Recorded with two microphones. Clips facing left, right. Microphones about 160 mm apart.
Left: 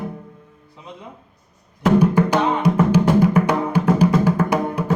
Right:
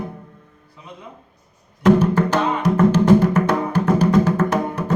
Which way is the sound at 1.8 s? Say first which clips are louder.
Right 1 dB; 10° left (ahead or behind).